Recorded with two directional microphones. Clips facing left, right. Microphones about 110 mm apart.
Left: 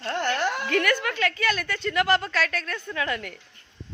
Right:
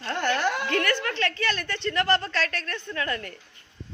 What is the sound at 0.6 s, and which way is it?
A woman's voice, 10° left (ahead or behind).